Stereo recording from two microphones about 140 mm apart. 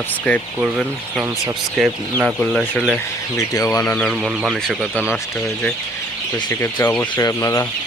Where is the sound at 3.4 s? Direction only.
25° left (ahead or behind).